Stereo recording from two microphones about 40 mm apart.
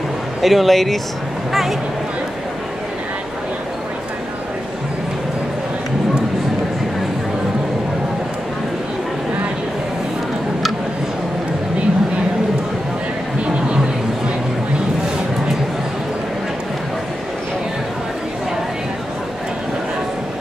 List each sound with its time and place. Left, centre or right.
0.4 s speech: centre